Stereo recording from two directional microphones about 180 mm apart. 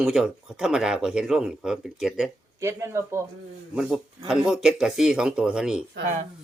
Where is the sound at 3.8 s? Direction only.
5° right (ahead or behind).